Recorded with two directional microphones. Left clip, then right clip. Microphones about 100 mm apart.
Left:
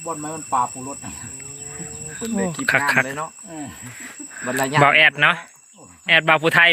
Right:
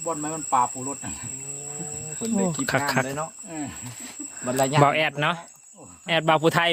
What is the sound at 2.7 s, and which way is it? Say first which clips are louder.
Speech: left 8 dB; 40° right (ahead or behind).